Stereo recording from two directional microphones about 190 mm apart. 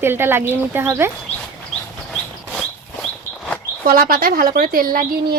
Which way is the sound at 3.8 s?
50° right (ahead or behind).